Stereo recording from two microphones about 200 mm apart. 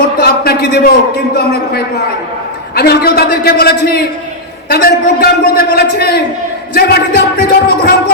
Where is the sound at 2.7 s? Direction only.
50° left (ahead or behind).